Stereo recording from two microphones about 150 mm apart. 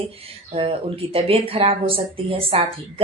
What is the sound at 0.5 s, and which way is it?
Speech, 35° right (ahead or behind).